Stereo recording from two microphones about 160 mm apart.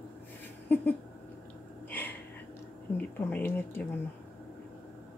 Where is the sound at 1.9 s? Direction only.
10° left (ahead or behind).